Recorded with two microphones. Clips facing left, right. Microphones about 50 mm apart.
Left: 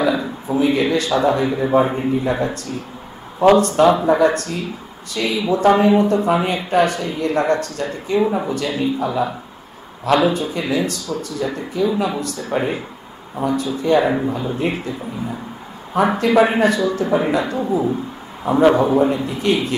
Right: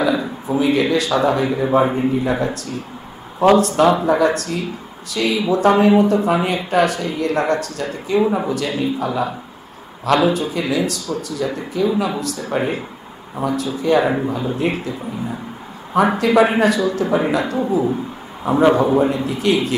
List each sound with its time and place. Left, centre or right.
0.0 s a man's voice: centre
15.9 s speech: centre